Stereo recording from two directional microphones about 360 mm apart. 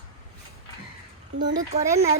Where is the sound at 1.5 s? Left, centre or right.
Centre.